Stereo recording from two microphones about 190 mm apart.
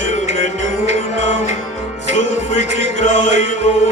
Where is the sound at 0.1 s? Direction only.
35° left (ahead or behind).